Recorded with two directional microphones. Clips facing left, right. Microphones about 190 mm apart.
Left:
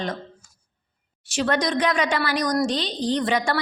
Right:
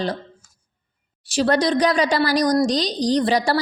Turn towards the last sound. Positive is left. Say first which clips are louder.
# right 4 dB
turn(degrees=-35)  # may be behind; listen again after turning